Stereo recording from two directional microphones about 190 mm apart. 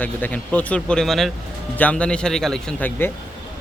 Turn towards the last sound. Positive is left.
turn(degrees=10)  # may be behind; listen again after turning